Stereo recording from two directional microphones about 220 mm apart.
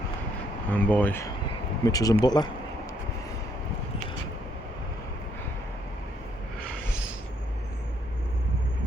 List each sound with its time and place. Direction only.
0.7 s speech: 5° left (ahead or behind)